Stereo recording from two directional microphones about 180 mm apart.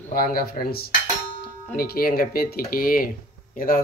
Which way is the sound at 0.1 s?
55° left (ahead or behind).